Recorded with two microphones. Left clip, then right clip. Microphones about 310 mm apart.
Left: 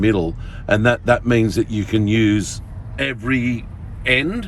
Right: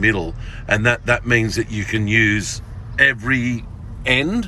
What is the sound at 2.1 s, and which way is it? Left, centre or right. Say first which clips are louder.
Speech: right 4 dB; left.